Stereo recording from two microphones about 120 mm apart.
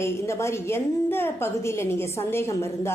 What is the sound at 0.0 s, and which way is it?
A woman's voice, 20° left (ahead or behind).